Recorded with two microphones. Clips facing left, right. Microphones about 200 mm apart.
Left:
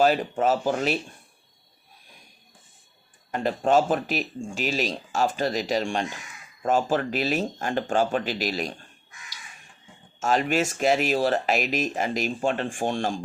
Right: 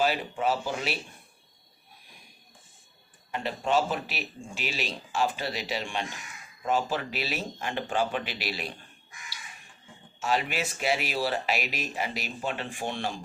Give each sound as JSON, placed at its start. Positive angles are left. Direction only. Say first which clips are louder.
{"t": 0.0, "sound": "speech", "louder": "left 6 dB", "side_deg": 45}
{"t": 3.3, "sound": "speech", "louder": "left 6 dB", "side_deg": 45}
{"t": 10.2, "sound": "speech", "louder": "left 6 dB", "side_deg": 45}